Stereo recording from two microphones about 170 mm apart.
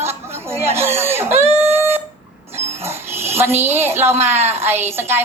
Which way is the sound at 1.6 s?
15° right (ahead or behind).